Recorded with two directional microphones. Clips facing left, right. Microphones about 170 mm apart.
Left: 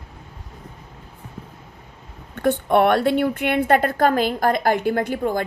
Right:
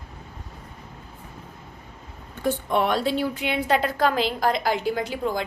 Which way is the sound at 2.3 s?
60° left (ahead or behind).